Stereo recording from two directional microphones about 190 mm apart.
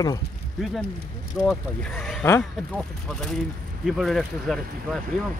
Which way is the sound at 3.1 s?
Centre (ahead or behind).